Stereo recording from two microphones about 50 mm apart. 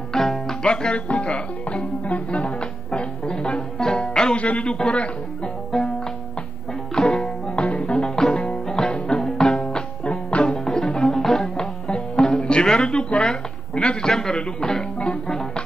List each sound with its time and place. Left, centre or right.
0.1 s music: centre
4.4 s speech: left
5.7 s music: centre
7.0 s music: centre
14.1 s a man's voice: centre
15.0 s music: left